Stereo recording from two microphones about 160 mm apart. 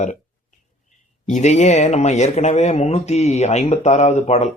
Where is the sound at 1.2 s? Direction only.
50° left (ahead or behind).